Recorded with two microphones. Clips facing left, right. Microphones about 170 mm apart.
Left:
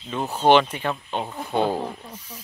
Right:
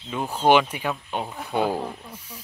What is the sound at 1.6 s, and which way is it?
Speech, 10° left (ahead or behind).